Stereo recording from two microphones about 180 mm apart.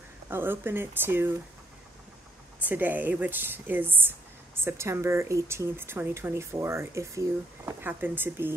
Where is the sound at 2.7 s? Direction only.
10° right (ahead or behind).